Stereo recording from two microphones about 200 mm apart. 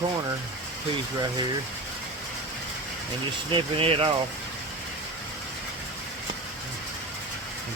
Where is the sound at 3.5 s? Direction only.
25° right (ahead or behind).